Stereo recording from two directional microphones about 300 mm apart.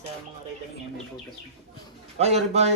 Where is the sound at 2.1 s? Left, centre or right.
Right.